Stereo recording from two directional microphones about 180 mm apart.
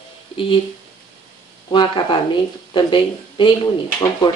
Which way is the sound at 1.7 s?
25° left (ahead or behind).